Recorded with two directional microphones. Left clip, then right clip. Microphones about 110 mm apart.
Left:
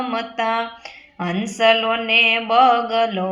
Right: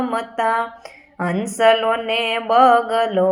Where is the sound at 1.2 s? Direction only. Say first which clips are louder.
Right 2 dB; 15° right (ahead or behind).